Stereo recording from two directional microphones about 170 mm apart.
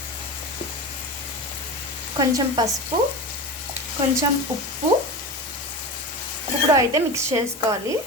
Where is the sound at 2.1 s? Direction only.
25° right (ahead or behind).